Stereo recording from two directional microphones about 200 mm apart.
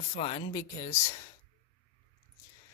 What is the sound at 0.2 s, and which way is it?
Speech, 30° left (ahead or behind).